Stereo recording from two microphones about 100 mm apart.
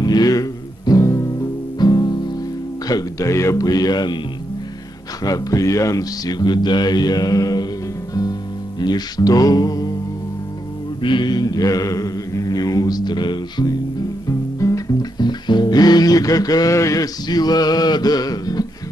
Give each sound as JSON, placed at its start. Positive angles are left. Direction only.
{"t": 0.0, "sound": "music", "side_deg": 40}
{"t": 1.8, "sound": "music", "side_deg": 45}
{"t": 2.9, "sound": "speech", "side_deg": 40}
{"t": 5.2, "sound": "speech", "side_deg": 35}
{"t": 8.1, "sound": "music", "side_deg": 40}
{"t": 11.0, "sound": "mantra", "side_deg": 55}
{"t": 14.6, "sound": "music", "side_deg": 35}